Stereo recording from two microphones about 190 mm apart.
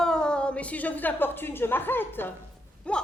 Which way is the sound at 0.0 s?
5° left (ahead or behind).